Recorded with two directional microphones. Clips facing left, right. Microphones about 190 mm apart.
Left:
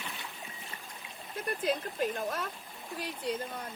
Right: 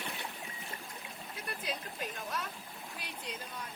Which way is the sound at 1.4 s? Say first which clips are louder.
Left 9 dB; 50° left (ahead or behind).